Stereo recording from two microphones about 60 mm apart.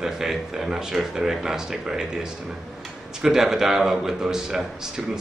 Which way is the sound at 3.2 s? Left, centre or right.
Centre.